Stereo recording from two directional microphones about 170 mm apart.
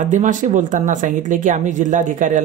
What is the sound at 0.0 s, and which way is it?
Speech, 45° right (ahead or behind).